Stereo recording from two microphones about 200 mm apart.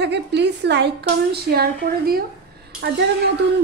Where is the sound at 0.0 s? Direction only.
60° right (ahead or behind).